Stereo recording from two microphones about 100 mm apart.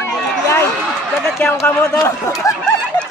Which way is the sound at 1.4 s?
25° left (ahead or behind).